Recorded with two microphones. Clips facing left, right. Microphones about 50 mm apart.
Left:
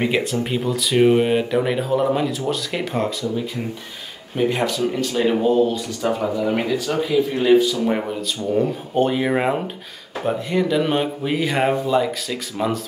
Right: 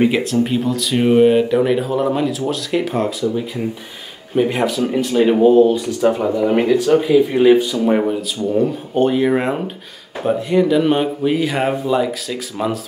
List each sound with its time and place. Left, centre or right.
0.0 s speech: centre
4.4 s speech: centre